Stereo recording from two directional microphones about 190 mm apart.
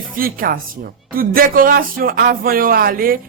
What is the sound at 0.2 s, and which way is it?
Speech, 50° right (ahead or behind).